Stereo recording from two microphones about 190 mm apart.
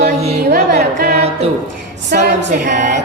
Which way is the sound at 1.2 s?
35° right (ahead or behind).